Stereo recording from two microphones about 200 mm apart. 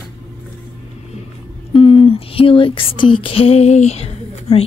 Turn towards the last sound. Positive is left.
turn(degrees=30)  # may be behind; listen again after turning